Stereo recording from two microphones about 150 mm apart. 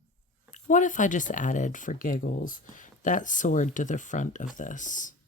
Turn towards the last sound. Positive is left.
turn(degrees=60)  # may be behind; listen again after turning